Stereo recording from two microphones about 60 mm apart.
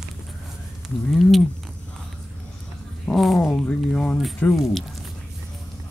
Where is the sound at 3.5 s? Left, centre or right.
Centre.